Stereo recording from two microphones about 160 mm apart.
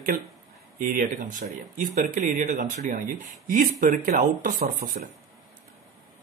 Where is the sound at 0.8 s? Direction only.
55° right (ahead or behind).